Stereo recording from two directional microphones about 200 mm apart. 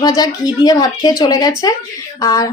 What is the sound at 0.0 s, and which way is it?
A woman's voice, 20° left (ahead or behind).